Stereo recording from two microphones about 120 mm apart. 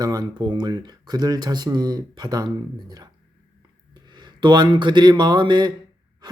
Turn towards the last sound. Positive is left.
turn(degrees=-40)  # may be behind; listen again after turning